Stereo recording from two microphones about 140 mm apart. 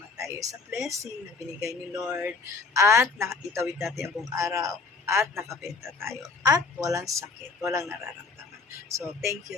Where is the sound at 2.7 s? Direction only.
20° right (ahead or behind).